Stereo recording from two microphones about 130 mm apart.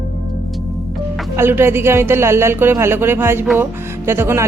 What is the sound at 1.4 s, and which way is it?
Speech, 20° right (ahead or behind).